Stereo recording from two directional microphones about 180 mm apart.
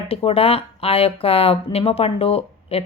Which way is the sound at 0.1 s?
30° left (ahead or behind).